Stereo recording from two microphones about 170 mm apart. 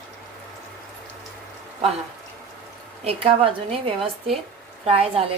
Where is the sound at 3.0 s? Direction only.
35° right (ahead or behind).